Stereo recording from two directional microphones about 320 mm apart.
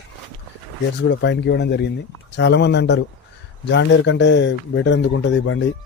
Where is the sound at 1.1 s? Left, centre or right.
Left.